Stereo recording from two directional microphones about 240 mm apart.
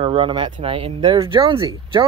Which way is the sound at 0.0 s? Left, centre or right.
Right.